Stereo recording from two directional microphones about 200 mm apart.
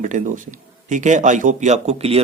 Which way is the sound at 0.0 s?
40° right (ahead or behind).